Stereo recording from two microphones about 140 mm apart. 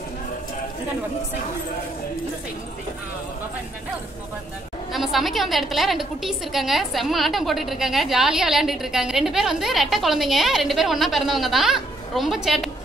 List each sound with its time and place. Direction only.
4.9 s a woman's voice: centre (ahead or behind)